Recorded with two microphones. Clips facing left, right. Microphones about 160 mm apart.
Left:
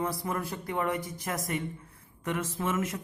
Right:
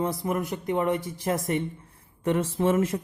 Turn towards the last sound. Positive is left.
turn(degrees=-30)  # may be behind; listen again after turning